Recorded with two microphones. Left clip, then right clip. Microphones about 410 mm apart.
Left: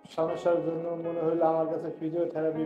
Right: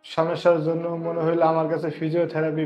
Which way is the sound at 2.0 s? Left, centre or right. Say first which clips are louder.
Right 7 dB; right.